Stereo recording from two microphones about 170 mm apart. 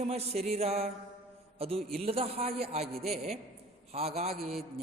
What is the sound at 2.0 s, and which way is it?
Speech, 35° right (ahead or behind).